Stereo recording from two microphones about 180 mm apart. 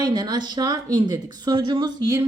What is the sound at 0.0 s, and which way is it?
Speech, 20° right (ahead or behind).